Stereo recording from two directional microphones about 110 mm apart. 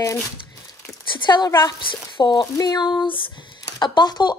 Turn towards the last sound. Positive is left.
turn(degrees=40)  # may be behind; listen again after turning